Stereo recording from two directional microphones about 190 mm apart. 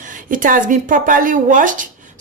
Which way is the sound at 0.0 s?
45° right (ahead or behind).